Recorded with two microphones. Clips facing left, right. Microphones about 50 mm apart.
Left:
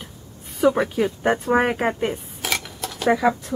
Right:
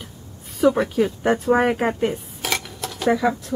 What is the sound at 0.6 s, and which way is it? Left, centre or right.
Speech, centre.